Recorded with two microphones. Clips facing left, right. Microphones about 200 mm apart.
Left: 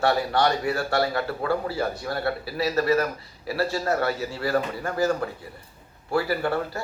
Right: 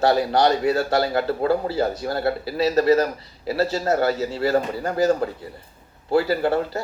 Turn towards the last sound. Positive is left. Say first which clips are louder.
# right 5 dB
turn(degrees=-25)  # may be behind; listen again after turning